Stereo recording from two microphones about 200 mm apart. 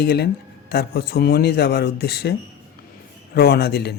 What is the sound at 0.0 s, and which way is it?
Speech, 55° left (ahead or behind).